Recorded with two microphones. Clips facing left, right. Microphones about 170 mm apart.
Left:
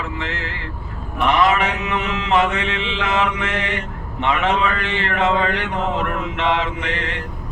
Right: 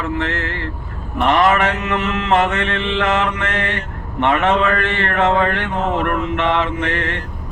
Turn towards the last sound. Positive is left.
turn(degrees=-55)  # may be behind; listen again after turning